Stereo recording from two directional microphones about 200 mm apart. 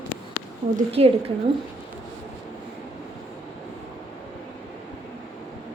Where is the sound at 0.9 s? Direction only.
30° right (ahead or behind).